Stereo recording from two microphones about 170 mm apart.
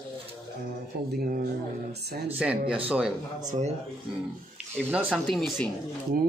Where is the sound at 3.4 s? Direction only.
45° right (ahead or behind).